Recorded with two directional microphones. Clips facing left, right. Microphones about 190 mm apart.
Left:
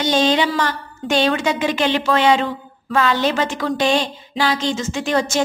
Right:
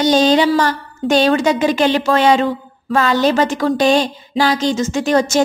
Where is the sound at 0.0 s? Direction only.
40° right (ahead or behind).